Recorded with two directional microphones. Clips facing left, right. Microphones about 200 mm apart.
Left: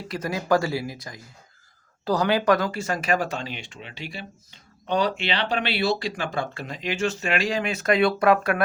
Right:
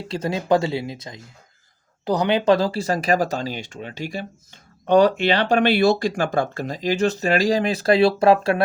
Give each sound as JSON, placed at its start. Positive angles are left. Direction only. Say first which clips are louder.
{"t": 0.1, "sound": "speech", "louder": "right 3 dB", "side_deg": -25}